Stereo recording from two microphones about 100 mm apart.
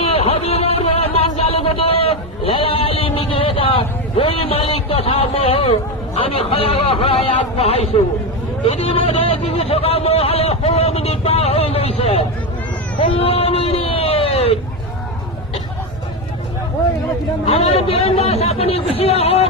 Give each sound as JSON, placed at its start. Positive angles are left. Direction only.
{"t": 0.0, "sound": "a sound", "side_deg": 85}
{"t": 6.1, "sound": "a man's voice", "side_deg": 80}
{"t": 8.6, "sound": "speech", "side_deg": 75}
{"t": 13.0, "sound": "speech", "side_deg": 70}
{"t": 17.4, "sound": "speech", "side_deg": 80}